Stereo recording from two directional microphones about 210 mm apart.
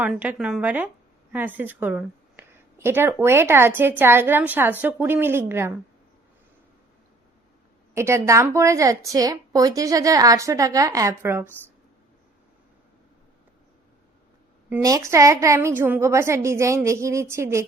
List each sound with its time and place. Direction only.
0.0 s a woman's voice: 5° right (ahead or behind)
7.9 s a woman's voice: 15° right (ahead or behind)
14.7 s a woman's voice: 15° right (ahead or behind)